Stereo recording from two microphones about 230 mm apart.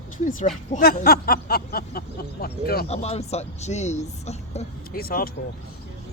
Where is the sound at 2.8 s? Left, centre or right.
Left.